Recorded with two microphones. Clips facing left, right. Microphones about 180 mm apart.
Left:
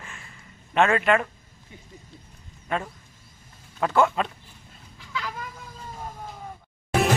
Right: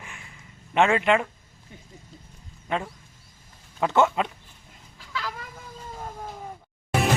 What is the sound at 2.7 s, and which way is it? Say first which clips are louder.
Speech: even; 20° right (ahead or behind).